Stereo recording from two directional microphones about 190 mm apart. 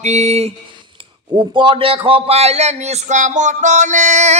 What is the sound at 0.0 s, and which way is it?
Speech, 35° right (ahead or behind).